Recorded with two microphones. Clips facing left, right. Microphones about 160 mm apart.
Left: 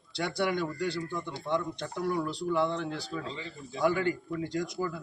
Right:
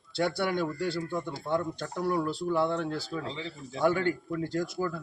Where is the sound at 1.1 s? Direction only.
40° right (ahead or behind).